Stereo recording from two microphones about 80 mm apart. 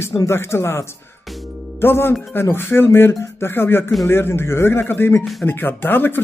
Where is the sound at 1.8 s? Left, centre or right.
Left.